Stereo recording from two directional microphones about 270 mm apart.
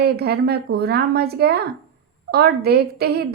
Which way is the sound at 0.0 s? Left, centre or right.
Right.